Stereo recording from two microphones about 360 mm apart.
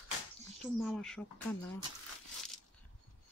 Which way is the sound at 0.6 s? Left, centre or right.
Centre.